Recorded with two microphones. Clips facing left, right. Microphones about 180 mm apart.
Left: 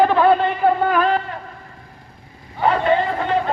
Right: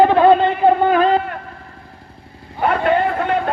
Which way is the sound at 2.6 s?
60° right (ahead or behind).